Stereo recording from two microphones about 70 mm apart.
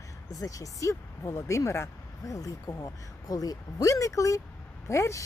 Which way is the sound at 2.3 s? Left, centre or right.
Left.